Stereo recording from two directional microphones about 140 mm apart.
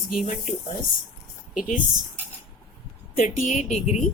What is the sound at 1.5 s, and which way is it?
Speech, 70° left (ahead or behind).